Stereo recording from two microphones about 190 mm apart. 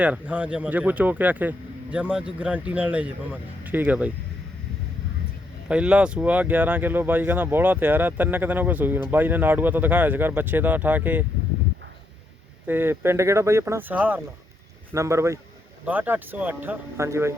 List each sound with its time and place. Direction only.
0.0 s speech: 5° right (ahead or behind)
5.6 s speech: 5° right (ahead or behind)
12.6 s speech: 10° right (ahead or behind)